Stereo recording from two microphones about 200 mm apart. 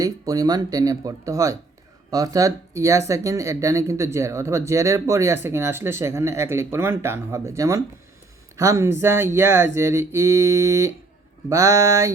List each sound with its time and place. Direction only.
0.0 s speech: 20° right (ahead or behind)